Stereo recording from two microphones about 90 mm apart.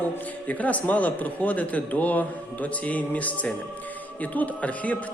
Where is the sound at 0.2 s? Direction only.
15° left (ahead or behind).